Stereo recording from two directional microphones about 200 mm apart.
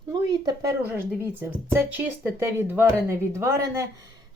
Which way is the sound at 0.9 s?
10° right (ahead or behind).